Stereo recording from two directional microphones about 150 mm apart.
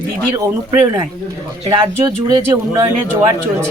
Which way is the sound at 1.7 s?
30° right (ahead or behind).